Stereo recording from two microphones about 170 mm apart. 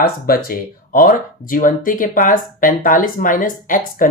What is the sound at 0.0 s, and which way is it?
Speech, 60° left (ahead or behind).